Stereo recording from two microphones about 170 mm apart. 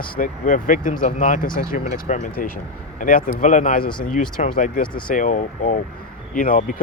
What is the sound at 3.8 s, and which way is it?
Speech, 30° left (ahead or behind).